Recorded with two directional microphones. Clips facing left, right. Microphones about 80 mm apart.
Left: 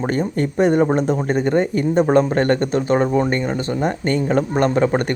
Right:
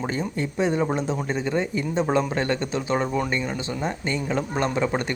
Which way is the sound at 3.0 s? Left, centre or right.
Left.